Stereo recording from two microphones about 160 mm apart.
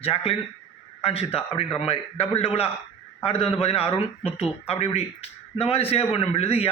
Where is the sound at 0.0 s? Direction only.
35° left (ahead or behind).